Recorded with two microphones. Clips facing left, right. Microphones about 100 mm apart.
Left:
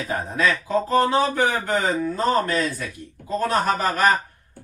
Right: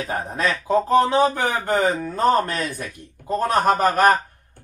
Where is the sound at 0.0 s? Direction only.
55° right (ahead or behind).